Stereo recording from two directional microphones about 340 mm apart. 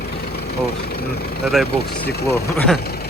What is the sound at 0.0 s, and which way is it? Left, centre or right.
Vehicle, left.